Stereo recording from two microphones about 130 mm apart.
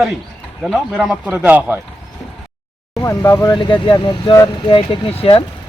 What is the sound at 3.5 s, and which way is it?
Speech, 35° left (ahead or behind).